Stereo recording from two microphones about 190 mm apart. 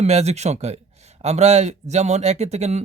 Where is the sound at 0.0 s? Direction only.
35° right (ahead or behind).